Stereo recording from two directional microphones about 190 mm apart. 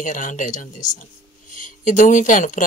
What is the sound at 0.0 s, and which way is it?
A woman's voice, 40° left (ahead or behind).